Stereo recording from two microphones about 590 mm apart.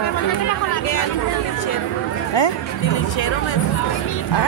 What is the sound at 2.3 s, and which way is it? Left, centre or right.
Chatter, left.